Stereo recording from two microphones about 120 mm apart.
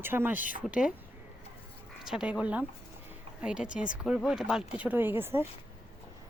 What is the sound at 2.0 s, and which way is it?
A woman's voice, 5° right (ahead or behind).